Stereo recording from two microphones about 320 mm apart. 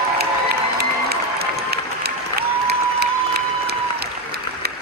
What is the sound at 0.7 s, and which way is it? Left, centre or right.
Crowd, right.